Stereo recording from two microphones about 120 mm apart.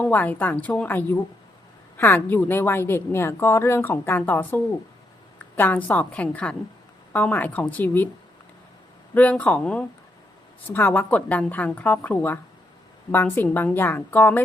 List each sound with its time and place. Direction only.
0.0 s a woman's voice: 15° left (ahead or behind)
9.1 s a woman's voice: 10° left (ahead or behind)